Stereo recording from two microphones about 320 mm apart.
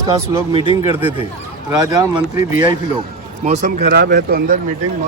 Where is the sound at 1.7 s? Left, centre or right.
Centre; by 4.5 s right.